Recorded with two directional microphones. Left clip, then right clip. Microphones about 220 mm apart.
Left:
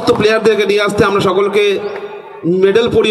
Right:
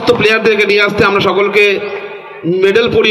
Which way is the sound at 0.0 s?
60° left (ahead or behind).